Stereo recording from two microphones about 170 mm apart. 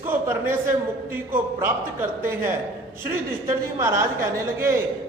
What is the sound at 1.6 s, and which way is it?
Speech, 15° right (ahead or behind).